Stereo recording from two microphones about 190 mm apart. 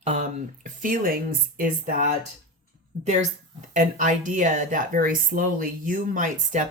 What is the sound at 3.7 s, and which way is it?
Speech, 40° right (ahead or behind).